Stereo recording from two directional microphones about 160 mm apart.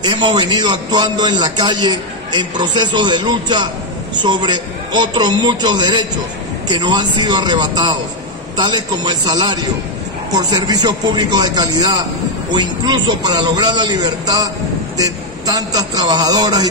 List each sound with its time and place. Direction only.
0.0 s a man's voice: 30° right (ahead or behind)